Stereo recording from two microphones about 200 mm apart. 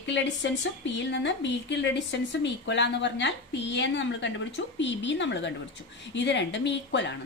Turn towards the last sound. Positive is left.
turn(degrees=60)  # may be behind; listen again after turning